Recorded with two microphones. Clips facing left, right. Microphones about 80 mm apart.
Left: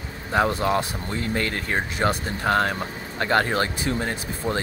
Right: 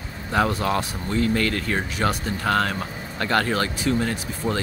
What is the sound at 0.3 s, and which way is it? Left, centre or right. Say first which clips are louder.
Speech: left 1 dB; left.